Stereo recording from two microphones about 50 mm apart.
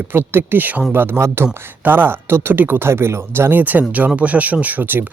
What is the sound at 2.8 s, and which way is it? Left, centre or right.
Speech, right.